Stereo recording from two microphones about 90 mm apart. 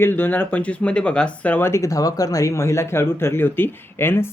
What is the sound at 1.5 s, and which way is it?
Speech, 30° left (ahead or behind).